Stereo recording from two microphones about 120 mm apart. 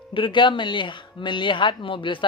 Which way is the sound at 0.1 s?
45° left (ahead or behind).